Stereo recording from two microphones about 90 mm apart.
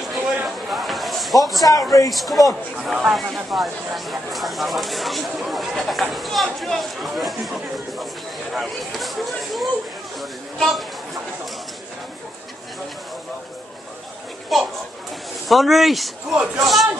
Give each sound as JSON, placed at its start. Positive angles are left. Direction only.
{"t": 0.7, "sound": "a sound", "side_deg": 0}
{"t": 1.6, "sound": "a man's voice", "side_deg": 40}
{"t": 2.0, "sound": "speech", "side_deg": 0}
{"t": 14.5, "sound": "speech", "side_deg": 0}